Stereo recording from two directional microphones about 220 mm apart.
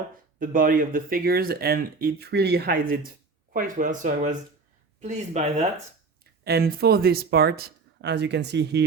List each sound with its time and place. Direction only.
0.3 s speech: 40° right (ahead or behind)
6.4 s speech: 45° right (ahead or behind)